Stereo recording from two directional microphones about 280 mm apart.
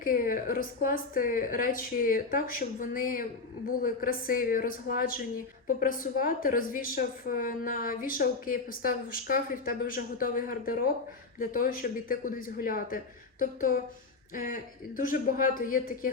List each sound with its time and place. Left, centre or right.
0.0 s a woman's voice: left